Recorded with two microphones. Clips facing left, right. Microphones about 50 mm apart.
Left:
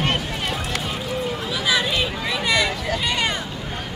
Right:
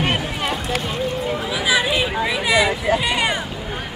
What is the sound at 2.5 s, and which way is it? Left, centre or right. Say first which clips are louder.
Hubbub: right 7 dB; centre.